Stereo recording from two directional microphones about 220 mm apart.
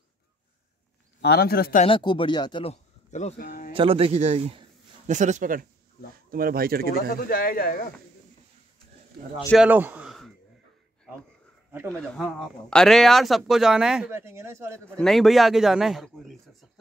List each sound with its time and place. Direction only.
1.2 s speech: 45° left (ahead or behind)
1.9 s speech: 25° left (ahead or behind); by 3.7 s 40° left (ahead or behind)
3.7 s a man's voice: 25° right (ahead or behind); by 6.9 s 45° right (ahead or behind)
6.9 s speech: 40° left (ahead or behind)
9.6 s a sound: 10° right (ahead or behind)
11.9 s speech: centre (ahead or behind)
15.0 s speech: centre (ahead or behind)